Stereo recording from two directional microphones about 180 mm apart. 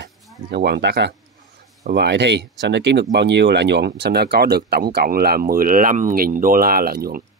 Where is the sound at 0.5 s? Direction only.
65° right (ahead or behind).